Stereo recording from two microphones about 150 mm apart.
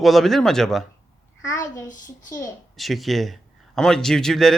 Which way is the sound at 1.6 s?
20° left (ahead or behind).